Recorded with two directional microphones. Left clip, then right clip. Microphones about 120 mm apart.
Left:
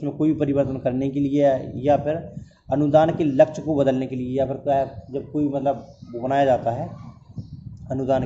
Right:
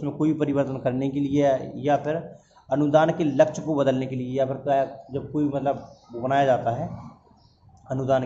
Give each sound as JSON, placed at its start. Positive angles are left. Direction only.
{"t": 0.0, "sound": "a man's voice", "side_deg": 25}
{"t": 7.9, "sound": "a man's voice", "side_deg": 30}